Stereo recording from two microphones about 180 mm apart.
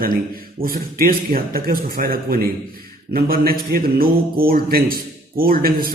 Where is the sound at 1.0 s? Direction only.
55° right (ahead or behind).